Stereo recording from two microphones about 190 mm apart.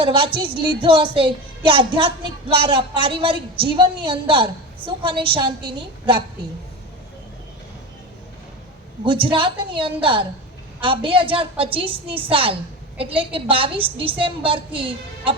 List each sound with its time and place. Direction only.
0.0 s a woman's voice: 25° right (ahead or behind)
9.2 s a woman's voice: 25° right (ahead or behind)